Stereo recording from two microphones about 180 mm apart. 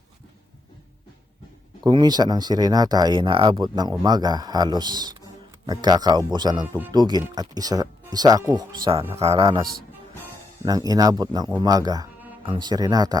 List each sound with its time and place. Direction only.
1.8 s speech: 25° right (ahead or behind)
10.7 s speech: 20° right (ahead or behind)